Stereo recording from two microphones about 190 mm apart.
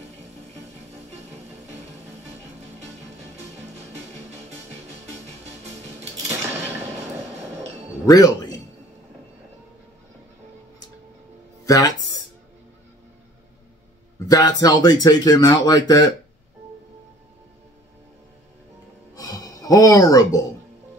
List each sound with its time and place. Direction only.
3.3 s music: 35° right (ahead or behind)
8.1 s speech: 20° left (ahead or behind)
11.6 s music: 20° left (ahead or behind)
14.2 s a sound: 20° left (ahead or behind)
14.6 s speech: 20° left (ahead or behind)
19.1 s a sound: 20° left (ahead or behind)